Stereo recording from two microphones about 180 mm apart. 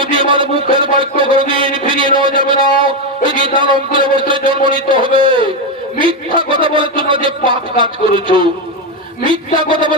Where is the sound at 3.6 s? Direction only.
25° right (ahead or behind).